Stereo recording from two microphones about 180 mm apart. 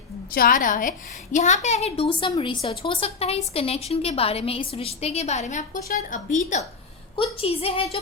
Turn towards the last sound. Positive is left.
turn(degrees=30)  # may be behind; listen again after turning